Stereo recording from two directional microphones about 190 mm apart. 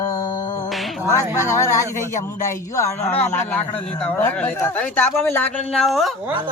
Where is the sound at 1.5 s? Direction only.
15° left (ahead or behind); by 6.3 s centre (ahead or behind).